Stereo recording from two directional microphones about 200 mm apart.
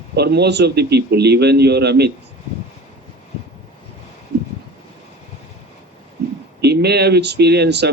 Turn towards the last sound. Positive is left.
turn(degrees=-55)  # may be behind; listen again after turning